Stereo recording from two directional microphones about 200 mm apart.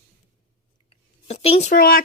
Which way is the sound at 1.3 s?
30° left (ahead or behind).